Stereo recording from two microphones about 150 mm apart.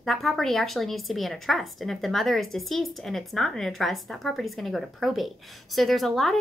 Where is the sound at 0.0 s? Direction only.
Centre (ahead or behind).